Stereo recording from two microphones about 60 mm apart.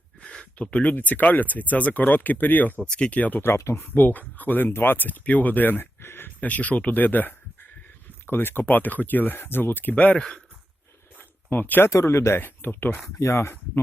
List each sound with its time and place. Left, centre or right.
0.2 s speech: centre; by 6.3 s left
6.4 s speech: left
9.9 s speech: centre
11.2 s a sound: left
11.9 s speech: left
13.1 s speech: left